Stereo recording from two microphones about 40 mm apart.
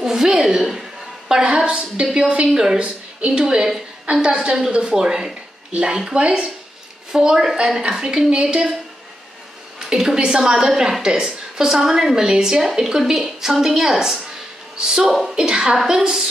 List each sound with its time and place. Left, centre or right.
0.0 s a woman's voice: centre
1.3 s a sound: right
1.6 s a woman's voice: right
2.8 s a woman's voice: right
4.4 s a woman's voice: centre
4.7 s a woman's voice: centre
9.8 s a woman's voice: centre